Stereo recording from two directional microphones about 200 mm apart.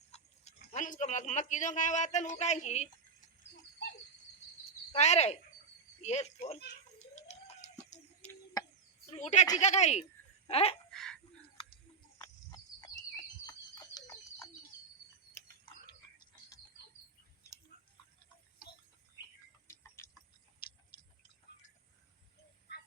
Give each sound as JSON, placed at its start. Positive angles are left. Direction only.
{"t": 0.1, "sound": "speech", "side_deg": 35}
{"t": 4.9, "sound": "speech", "side_deg": 35}
{"t": 7.0, "sound": "a sound", "side_deg": 35}
{"t": 8.2, "sound": "a sound", "side_deg": 10}
{"t": 9.1, "sound": "speech", "side_deg": 35}
{"t": 10.9, "sound": "dog", "side_deg": 0}
{"t": 12.2, "sound": "bird", "side_deg": 20}
{"t": 13.5, "sound": "a sound", "side_deg": 20}
{"t": 19.6, "sound": "tick-tock", "side_deg": 15}